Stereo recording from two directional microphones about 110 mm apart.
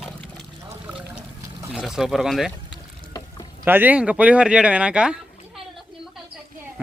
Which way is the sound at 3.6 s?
20° right (ahead or behind).